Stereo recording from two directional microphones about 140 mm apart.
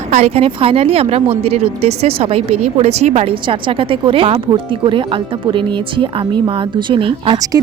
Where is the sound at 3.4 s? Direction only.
35° right (ahead or behind).